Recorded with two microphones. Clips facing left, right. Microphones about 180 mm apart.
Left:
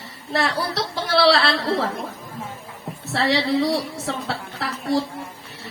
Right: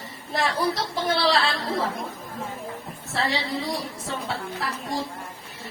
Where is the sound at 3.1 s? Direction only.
75° left (ahead or behind).